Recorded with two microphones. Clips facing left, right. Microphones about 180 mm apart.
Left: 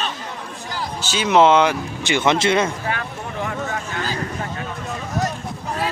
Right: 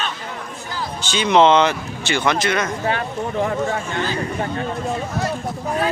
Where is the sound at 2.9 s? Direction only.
30° right (ahead or behind).